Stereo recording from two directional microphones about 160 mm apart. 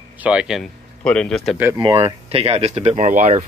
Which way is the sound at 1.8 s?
30° right (ahead or behind).